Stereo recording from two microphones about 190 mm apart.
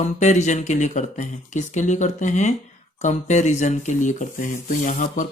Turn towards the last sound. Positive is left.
turn(degrees=40)  # may be behind; listen again after turning